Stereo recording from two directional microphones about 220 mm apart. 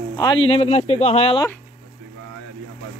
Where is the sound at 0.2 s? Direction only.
20° left (ahead or behind).